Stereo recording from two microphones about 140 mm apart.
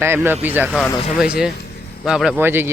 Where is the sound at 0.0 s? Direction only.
15° right (ahead or behind).